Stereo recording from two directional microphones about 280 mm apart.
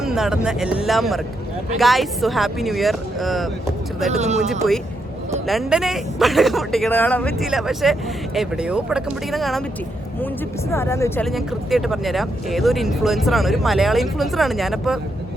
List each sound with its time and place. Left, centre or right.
0.0 s speech: centre
4.1 s speech: right
4.4 s speech: centre
10.7 s speech: centre